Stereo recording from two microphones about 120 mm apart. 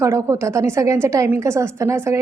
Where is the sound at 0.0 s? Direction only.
25° right (ahead or behind).